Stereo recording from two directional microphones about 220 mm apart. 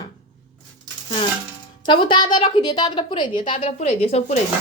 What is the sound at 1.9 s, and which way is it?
A woman's voice, 20° left (ahead or behind).